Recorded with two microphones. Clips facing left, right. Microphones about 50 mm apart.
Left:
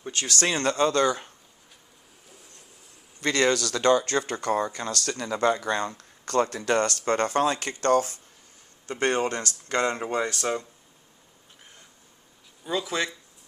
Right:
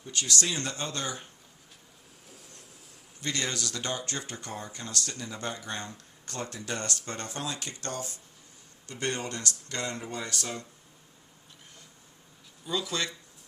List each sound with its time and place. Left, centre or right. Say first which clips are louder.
0.0 s speech: left 2 dB; left
0.4 s speech: left 10 dB; left
3.2 s speech: left 10 dB; left
12.6 s speech: left 4 dB; left